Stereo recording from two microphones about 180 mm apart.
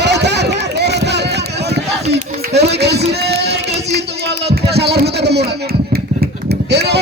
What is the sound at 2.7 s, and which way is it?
Speech, 65° right (ahead or behind).